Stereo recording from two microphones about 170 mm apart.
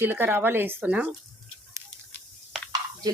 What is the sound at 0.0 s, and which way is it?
Speech, 10° right (ahead or behind).